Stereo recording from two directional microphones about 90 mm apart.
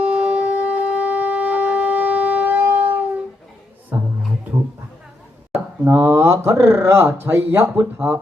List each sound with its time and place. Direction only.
0.0 s shofar: 15° right (ahead or behind)
3.9 s music: 20° right (ahead or behind)
5.8 s speech: 30° right (ahead or behind)